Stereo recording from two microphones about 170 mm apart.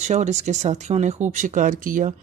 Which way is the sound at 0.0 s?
45° right (ahead or behind).